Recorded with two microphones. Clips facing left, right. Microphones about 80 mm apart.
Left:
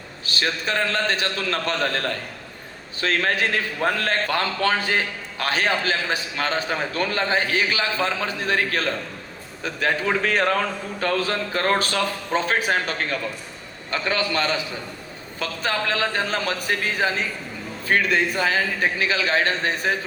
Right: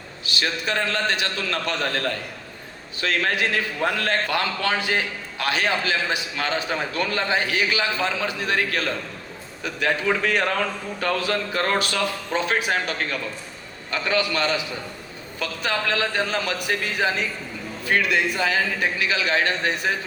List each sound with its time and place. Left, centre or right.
0.3 s a man's voice: left